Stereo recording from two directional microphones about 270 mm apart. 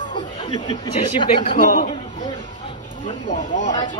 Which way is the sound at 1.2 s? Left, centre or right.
Centre.